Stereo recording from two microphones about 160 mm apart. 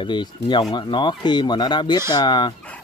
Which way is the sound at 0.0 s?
30° left (ahead or behind).